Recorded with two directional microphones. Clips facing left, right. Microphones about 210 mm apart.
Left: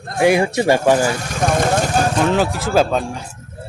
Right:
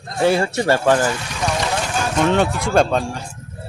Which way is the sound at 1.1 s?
50° left (ahead or behind).